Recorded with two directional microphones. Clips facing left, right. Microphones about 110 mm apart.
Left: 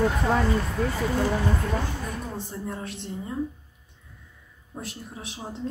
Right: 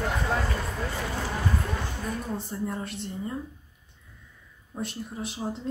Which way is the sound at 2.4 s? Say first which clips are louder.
Right 1 dB; centre (ahead or behind).